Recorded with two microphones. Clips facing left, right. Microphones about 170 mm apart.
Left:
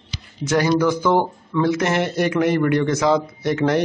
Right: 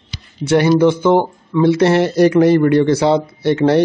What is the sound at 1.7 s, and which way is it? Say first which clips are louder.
A man's voice: right 7 dB; 35° right (ahead or behind).